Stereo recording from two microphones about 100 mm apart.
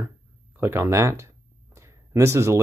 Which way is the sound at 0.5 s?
20° right (ahead or behind).